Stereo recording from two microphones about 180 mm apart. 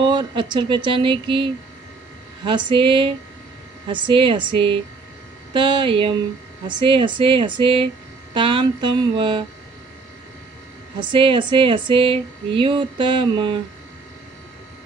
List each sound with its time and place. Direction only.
0.0 s speech: 25° right (ahead or behind)
11.0 s speech: 30° right (ahead or behind)